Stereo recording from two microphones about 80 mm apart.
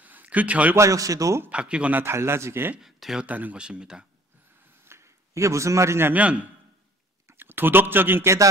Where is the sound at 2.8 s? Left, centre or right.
Centre.